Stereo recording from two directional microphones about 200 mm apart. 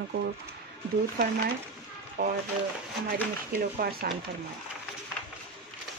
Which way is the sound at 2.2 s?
55° right (ahead or behind).